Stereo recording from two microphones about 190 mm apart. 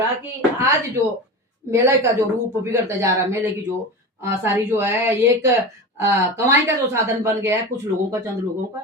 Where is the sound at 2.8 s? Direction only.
15° right (ahead or behind).